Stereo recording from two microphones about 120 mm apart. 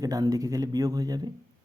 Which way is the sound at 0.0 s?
30° right (ahead or behind).